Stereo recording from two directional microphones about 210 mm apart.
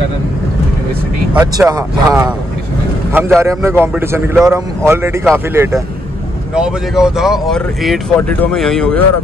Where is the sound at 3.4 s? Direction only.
15° right (ahead or behind); by 9.0 s 5° left (ahead or behind).